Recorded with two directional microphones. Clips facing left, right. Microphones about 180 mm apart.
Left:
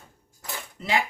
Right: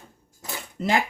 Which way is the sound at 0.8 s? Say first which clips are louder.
Right 3 dB; 45° right (ahead or behind).